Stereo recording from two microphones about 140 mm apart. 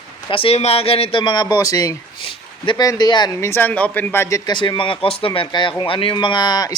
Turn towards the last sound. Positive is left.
turn(degrees=30)  # may be behind; listen again after turning